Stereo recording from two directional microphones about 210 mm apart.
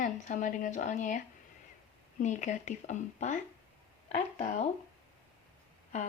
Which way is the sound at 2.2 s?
35° left (ahead or behind).